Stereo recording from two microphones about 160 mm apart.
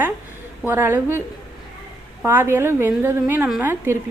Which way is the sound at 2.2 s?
15° right (ahead or behind).